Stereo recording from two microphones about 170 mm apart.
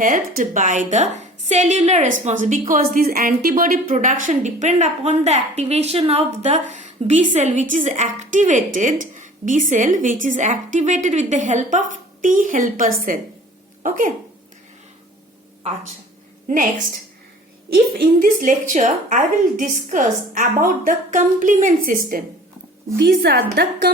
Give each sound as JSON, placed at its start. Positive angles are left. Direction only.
{"t": 0.0, "sound": "a woman's voice", "side_deg": -55}
{"t": 16.5, "sound": "a woman's voice", "side_deg": -50}
{"t": 23.0, "sound": "a woman's voice", "side_deg": -65}